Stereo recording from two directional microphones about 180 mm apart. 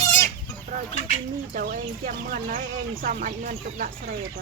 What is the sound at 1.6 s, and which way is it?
Speech, 50° right (ahead or behind).